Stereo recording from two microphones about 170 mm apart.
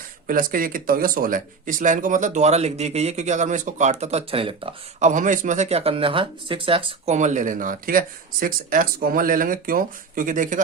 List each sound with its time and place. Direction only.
0.3 s speech: 55° right (ahead or behind); by 4.7 s 30° right (ahead or behind)
4.9 s speech: 45° right (ahead or behind)